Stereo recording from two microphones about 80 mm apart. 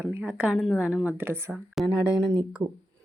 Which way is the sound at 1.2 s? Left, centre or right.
Right.